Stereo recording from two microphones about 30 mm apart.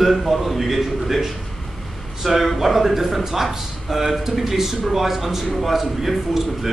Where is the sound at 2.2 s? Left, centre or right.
Centre.